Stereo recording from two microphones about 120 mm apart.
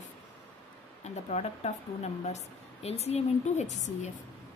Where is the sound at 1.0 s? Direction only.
65° left (ahead or behind).